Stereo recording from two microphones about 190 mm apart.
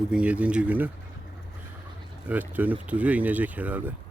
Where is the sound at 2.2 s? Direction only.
10° right (ahead or behind).